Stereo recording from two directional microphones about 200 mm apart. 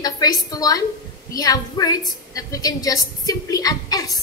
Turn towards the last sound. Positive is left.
turn(degrees=20)  # may be behind; listen again after turning